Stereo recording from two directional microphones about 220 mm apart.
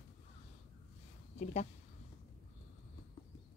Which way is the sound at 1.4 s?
30° left (ahead or behind).